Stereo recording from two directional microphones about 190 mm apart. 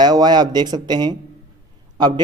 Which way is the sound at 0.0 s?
20° right (ahead or behind).